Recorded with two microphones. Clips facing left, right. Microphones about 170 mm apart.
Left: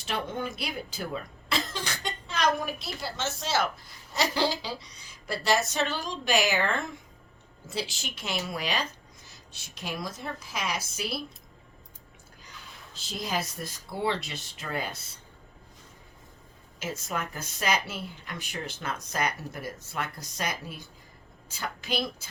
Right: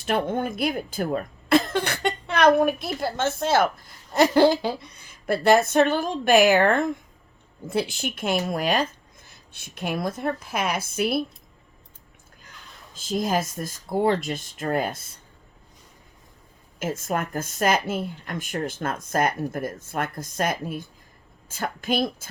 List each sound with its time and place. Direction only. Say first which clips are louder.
0.0 s speech: right 8 dB; 55° right (ahead or behind)
12.9 s speech: right 8 dB; 45° right (ahead or behind)
16.8 s speech: right 7 dB; 50° right (ahead or behind)